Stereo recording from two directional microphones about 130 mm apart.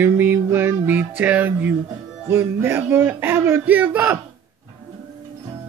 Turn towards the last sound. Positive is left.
turn(degrees=-15)  # may be behind; listen again after turning